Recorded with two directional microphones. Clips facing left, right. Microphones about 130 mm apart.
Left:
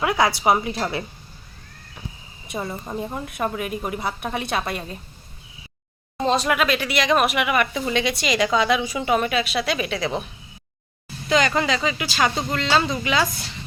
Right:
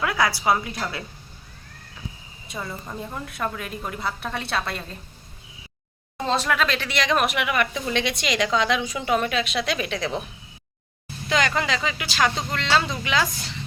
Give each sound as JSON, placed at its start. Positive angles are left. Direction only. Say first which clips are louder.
{"t": 0.0, "sound": "a woman's voice", "louder": "left 3 dB", "side_deg": 20}
{"t": 2.5, "sound": "a woman's voice", "louder": "left 4 dB", "side_deg": 25}
{"t": 6.2, "sound": "speech", "louder": "left 3 dB", "side_deg": 15}
{"t": 11.3, "sound": "speech", "louder": "left 3 dB", "side_deg": 0}